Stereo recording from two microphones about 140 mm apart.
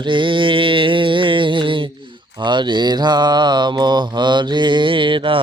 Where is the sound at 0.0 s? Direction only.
35° right (ahead or behind).